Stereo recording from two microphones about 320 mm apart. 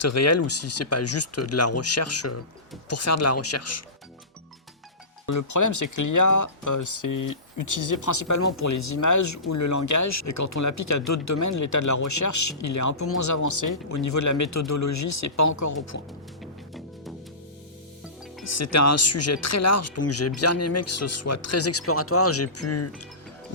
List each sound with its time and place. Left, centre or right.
0.0 s speech: left
5.2 s speech: left
18.5 s speech: left